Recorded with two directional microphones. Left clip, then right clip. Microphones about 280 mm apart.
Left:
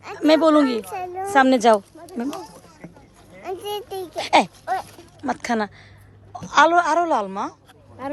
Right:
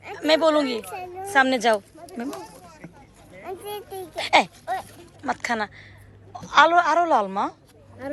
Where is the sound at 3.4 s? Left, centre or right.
Left.